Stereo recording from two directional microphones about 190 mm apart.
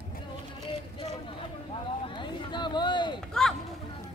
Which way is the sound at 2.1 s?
25° left (ahead or behind).